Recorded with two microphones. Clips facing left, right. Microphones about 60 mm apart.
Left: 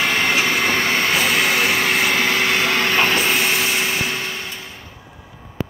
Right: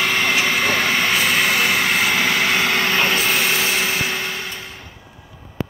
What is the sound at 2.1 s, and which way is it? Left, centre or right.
Vehicle, centre.